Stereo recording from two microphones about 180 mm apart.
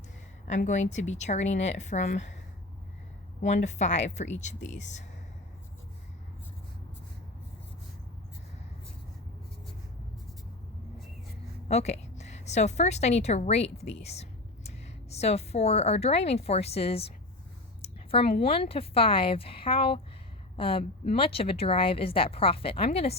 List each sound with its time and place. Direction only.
0.4 s speech: 40° left (ahead or behind)
3.4 s speech: 40° left (ahead or behind)
11.7 s a woman's voice: 40° left (ahead or behind)